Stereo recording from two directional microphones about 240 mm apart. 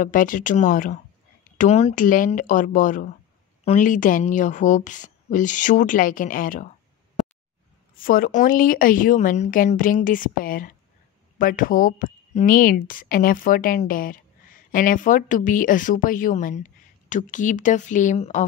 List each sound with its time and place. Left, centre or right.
0.0 s speech: left
8.0 s speech: left